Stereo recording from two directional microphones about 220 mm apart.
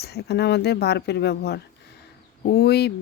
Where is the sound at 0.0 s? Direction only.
50° left (ahead or behind).